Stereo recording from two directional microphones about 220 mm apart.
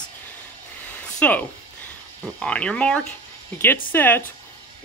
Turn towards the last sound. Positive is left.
turn(degrees=10)  # may be behind; listen again after turning